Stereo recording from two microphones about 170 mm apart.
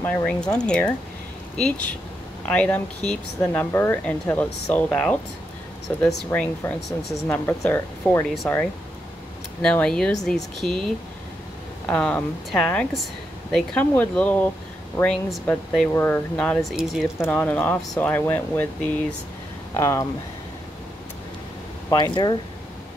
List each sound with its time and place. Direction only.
0.0 s speech: 5° left (ahead or behind)
17.2 s speech: 10° left (ahead or behind)
21.9 s speech: 25° left (ahead or behind)